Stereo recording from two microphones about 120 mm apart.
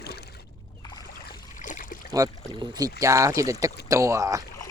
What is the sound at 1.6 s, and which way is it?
Boat, 90° left.